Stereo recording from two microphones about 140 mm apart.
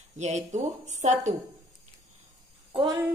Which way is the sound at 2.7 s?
30° right (ahead or behind).